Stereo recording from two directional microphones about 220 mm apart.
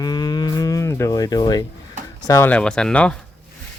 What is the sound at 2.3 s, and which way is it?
Speech, 10° left (ahead or behind).